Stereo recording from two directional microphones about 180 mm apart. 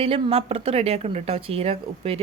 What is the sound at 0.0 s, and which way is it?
A woman's voice, 30° right (ahead or behind).